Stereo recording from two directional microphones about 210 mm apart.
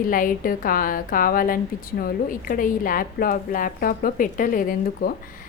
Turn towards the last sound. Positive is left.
turn(degrees=40)  # may be behind; listen again after turning